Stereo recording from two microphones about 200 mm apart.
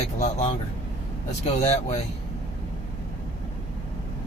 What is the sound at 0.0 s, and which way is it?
Speech, 35° left (ahead or behind).